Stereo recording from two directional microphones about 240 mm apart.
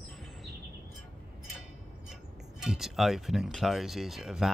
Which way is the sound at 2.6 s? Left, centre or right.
Centre.